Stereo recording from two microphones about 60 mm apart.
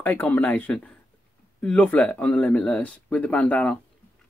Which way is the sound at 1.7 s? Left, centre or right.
Left.